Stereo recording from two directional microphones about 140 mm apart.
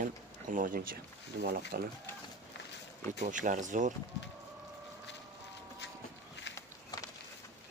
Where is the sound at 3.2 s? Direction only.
65° right (ahead or behind).